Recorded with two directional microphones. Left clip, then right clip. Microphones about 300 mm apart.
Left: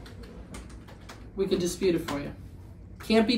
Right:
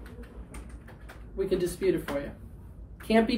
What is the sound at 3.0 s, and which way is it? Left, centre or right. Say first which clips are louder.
Speech: even; centre.